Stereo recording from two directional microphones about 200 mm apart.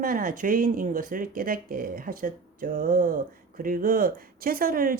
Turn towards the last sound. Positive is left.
turn(degrees=-45)  # may be behind; listen again after turning